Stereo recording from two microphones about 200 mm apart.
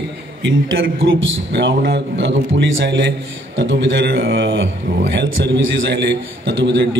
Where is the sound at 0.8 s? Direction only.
55° right (ahead or behind).